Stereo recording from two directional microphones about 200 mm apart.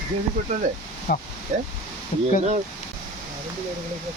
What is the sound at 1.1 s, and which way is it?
Speech, 50° left (ahead or behind).